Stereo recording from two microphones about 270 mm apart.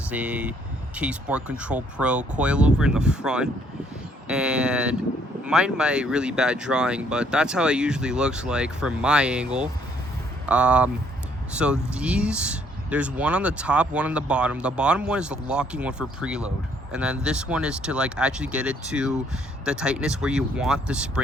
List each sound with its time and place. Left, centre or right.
0.1 s speech: centre